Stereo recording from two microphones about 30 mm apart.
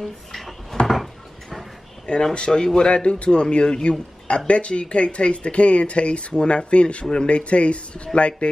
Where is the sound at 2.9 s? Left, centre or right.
Left.